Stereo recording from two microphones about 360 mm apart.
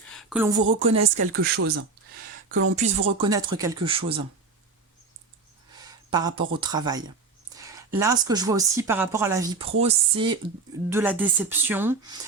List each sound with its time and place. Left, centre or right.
0.1 s speech: centre
0.9 s speech: right
1.3 s speech: right
5.8 s a woman's voice: centre